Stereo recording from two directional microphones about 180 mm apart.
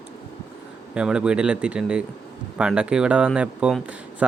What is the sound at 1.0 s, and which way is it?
Speech, 5° right (ahead or behind).